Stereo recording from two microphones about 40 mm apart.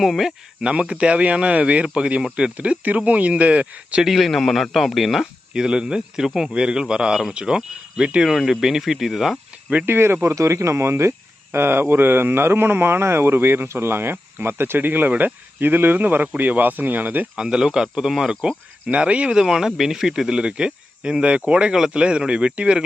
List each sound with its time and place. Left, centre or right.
0.0 s speech: centre
0.6 s speech: right
4.0 s speech: centre
5.5 s speech: centre
6.5 s speech: right
8.3 s speech: centre
9.8 s speech: right
11.5 s speech: right
17.3 s speech: centre
18.4 s speech: right
19.4 s speech: centre; by 21.7 s right
21.7 s speech: centre
21.9 s speech: right